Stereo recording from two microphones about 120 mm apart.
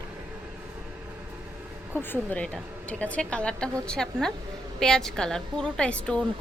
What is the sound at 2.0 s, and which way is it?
A woman's voice, 15° left (ahead or behind).